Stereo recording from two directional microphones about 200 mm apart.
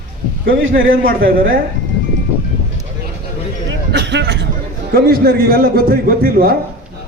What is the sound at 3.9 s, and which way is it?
A man's voice, 60° right (ahead or behind).